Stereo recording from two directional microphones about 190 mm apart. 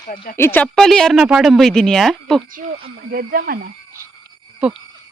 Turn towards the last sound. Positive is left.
turn(degrees=-5)  # may be behind; listen again after turning